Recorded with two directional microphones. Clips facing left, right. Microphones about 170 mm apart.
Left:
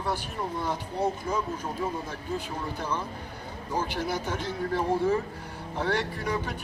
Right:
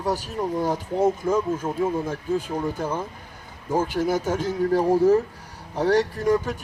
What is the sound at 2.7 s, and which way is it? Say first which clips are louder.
Speech: right 4 dB; 45° right (ahead or behind).